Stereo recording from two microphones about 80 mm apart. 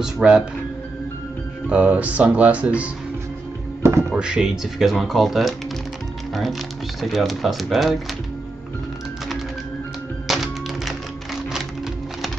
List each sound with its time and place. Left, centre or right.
0.0 s speech: centre
1.7 s speech: centre
4.1 s speech: centre
7.0 s speech: centre
10.2 s music: centre